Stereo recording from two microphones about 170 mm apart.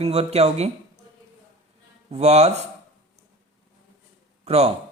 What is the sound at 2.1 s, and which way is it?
Speech, 40° right (ahead or behind).